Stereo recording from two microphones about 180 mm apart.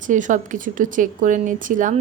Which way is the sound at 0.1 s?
45° right (ahead or behind).